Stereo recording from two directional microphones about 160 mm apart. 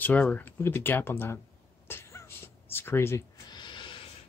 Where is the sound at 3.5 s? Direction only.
30° left (ahead or behind).